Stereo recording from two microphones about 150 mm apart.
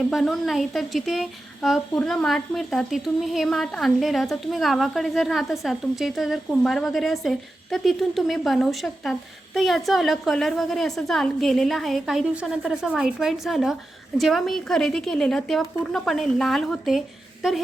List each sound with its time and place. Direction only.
0.0 s a woman's voice: centre (ahead or behind)